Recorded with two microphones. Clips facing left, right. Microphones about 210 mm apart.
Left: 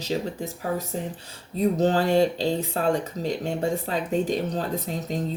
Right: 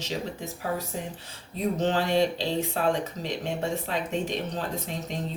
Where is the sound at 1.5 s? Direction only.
40° left (ahead or behind).